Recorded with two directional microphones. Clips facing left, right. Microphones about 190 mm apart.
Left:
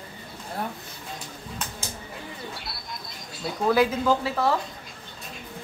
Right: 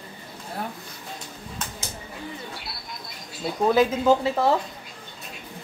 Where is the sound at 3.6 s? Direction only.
20° right (ahead or behind).